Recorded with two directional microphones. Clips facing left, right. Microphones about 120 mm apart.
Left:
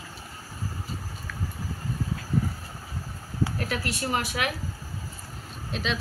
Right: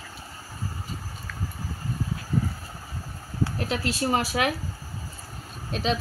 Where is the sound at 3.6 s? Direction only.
25° right (ahead or behind).